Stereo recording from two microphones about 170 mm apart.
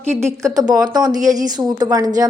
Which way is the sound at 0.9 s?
20° right (ahead or behind).